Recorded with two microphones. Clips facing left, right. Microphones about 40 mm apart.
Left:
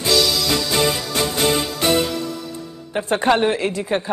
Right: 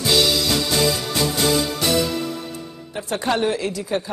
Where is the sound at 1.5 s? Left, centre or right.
Left.